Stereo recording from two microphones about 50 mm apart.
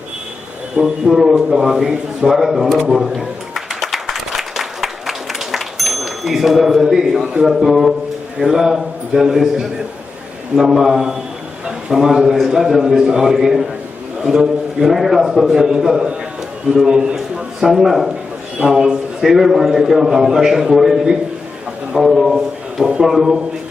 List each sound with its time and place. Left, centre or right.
0.8 s a man's voice: centre
2.8 s a sound: centre
3.8 s applause: centre
7.4 s a man's voice: centre